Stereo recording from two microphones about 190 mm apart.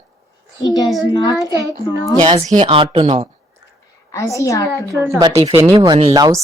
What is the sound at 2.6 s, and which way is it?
Speech, 30° right (ahead or behind).